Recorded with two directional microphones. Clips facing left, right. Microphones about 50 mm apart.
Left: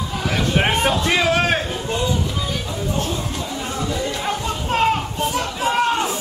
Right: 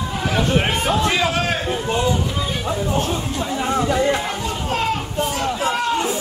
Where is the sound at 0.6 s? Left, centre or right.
Left.